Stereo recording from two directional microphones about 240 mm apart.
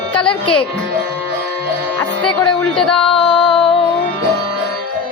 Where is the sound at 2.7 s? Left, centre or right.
Centre.